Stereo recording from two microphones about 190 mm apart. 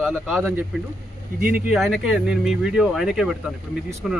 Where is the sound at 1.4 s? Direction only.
50° right (ahead or behind).